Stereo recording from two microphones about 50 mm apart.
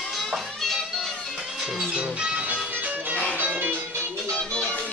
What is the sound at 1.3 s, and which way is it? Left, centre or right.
Music, centre.